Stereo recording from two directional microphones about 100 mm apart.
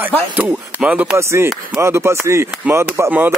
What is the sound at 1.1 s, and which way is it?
Speech, 25° right (ahead or behind).